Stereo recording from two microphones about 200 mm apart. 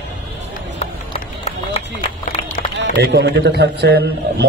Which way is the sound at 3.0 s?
55° right (ahead or behind).